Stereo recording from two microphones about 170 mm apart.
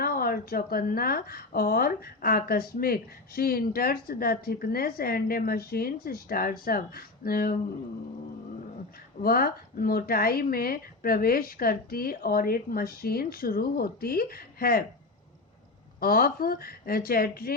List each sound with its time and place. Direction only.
0.0 s a woman's voice: 60° left (ahead or behind)
9.2 s a woman's voice: 60° left (ahead or behind)
16.0 s a woman's voice: 60° left (ahead or behind)